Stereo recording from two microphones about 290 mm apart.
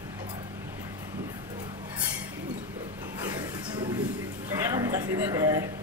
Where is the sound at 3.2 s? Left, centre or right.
Centre.